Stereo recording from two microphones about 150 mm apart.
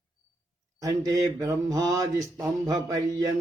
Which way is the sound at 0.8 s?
20° right (ahead or behind).